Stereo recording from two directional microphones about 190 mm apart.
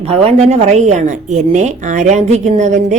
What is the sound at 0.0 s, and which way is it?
A woman's voice, 30° right (ahead or behind).